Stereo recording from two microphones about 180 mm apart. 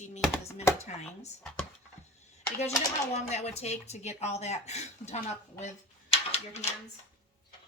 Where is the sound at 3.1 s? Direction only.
40° left (ahead or behind).